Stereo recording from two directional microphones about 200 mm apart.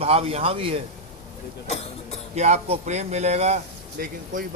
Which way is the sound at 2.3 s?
35° right (ahead or behind).